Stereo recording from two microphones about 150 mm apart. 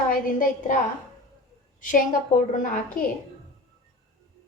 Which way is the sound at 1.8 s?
60° left (ahead or behind).